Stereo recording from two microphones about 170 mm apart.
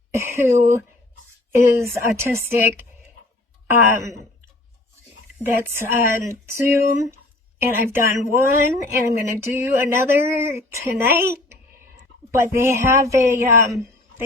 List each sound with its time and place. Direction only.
0.1 s speech: 15° right (ahead or behind)
3.7 s speech: 15° right (ahead or behind)
5.7 s speech: 15° right (ahead or behind)